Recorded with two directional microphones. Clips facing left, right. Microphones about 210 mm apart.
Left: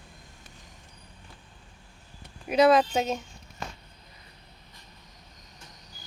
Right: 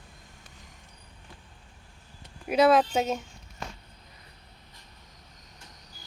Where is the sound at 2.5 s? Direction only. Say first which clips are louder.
Left 1 dB; 5° right (ahead or behind).